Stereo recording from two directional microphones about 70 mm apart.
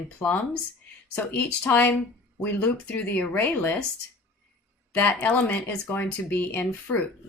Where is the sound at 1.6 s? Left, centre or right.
Left.